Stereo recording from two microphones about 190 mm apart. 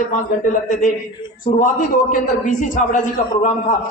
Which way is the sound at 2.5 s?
45° left (ahead or behind).